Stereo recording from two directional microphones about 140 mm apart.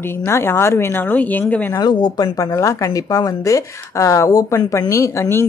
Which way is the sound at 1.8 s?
30° left (ahead or behind).